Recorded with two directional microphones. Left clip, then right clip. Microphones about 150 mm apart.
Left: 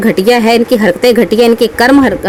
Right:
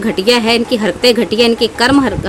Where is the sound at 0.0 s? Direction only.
35° left (ahead or behind).